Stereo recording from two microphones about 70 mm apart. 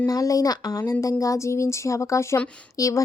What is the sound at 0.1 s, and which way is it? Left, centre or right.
Speech, left.